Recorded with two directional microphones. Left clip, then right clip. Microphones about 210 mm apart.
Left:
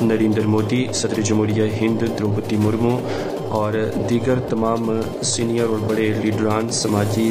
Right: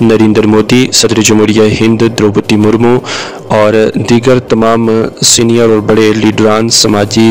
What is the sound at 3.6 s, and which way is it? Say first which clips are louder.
Speech: right 14 dB; 50° right (ahead or behind).